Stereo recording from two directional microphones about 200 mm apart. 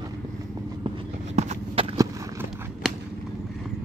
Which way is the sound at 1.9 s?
15° right (ahead or behind).